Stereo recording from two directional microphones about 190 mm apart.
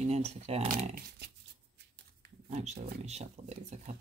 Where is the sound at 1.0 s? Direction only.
60° right (ahead or behind).